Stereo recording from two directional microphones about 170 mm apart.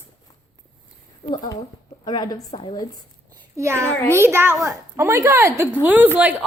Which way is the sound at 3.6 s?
15° right (ahead or behind).